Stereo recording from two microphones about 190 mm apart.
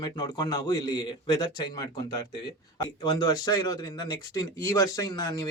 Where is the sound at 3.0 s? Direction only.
20° left (ahead or behind).